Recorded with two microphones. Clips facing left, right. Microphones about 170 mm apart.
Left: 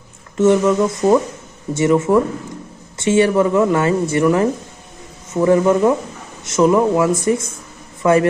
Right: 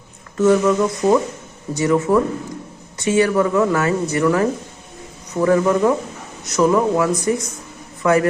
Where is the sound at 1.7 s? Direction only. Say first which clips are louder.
Left 2 dB; 25° left (ahead or behind).